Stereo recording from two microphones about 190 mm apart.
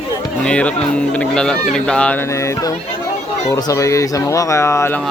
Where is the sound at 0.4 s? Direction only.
5° left (ahead or behind).